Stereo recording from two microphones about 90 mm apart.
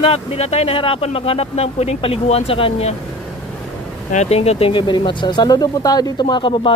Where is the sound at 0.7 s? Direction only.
85° left.